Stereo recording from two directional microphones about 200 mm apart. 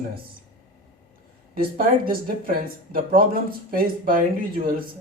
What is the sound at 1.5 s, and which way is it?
Speech, 45° right (ahead or behind).